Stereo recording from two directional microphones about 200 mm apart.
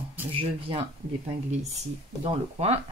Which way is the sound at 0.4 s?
25° right (ahead or behind).